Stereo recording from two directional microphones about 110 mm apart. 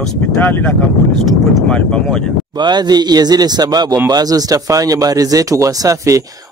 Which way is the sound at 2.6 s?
40° right (ahead or behind).